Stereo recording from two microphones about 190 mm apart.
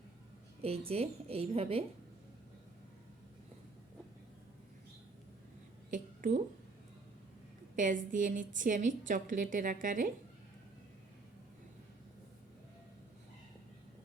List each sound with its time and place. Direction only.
0.9 s a woman's voice: 30° right (ahead or behind)
5.9 s a sound: 45° right (ahead or behind)
7.8 s a woman's voice: 45° right (ahead or behind)